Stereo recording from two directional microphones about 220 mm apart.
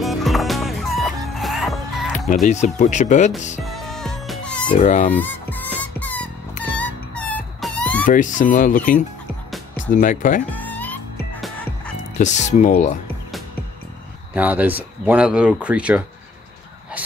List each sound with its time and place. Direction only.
0.0 s music: centre (ahead or behind)
2.4 s speech: 35° left (ahead or behind)
3.6 s music: centre (ahead or behind)
4.7 s speech: 35° left (ahead or behind)
5.1 s music: 10° left (ahead or behind)
6.6 s a sound: 5° left (ahead or behind)
8.1 s speech: 35° left (ahead or behind)
10.5 s music: 5° left (ahead or behind)
12.2 s speech: 30° left (ahead or behind)
14.3 s speech: 5° right (ahead or behind)